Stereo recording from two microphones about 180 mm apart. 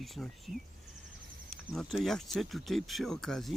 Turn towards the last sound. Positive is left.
turn(degrees=5)  # may be behind; listen again after turning